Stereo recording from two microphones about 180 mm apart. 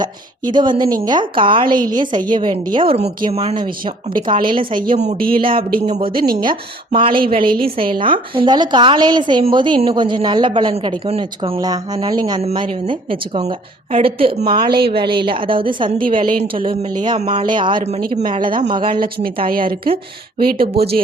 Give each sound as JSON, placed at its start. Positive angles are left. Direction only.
{"t": 0.0, "sound": "a woman's voice", "side_deg": -25}
{"t": 5.1, "sound": "speech", "side_deg": -55}
{"t": 5.8, "sound": "a woman's voice", "side_deg": -30}
{"t": 18.9, "sound": "speech", "side_deg": -55}